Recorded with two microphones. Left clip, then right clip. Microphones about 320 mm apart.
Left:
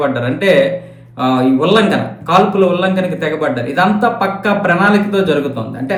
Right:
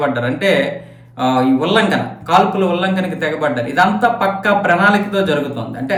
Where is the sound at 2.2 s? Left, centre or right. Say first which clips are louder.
Left 2 dB; right.